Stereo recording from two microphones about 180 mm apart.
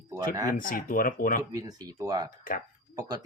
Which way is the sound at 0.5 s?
50° left (ahead or behind).